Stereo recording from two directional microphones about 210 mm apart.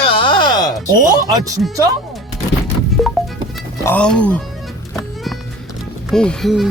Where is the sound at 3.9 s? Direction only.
5° left (ahead or behind).